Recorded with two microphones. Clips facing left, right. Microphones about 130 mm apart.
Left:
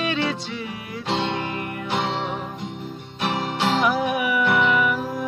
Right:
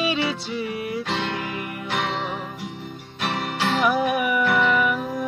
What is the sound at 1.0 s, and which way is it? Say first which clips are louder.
Music: left 2 dB; 25° left (ahead or behind).